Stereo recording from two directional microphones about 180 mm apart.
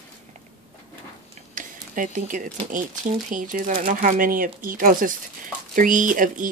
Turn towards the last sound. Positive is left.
turn(degrees=-45)  # may be behind; listen again after turning